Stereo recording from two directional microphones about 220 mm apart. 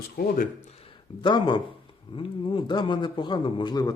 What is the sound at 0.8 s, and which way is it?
A man's voice, 20° left (ahead or behind).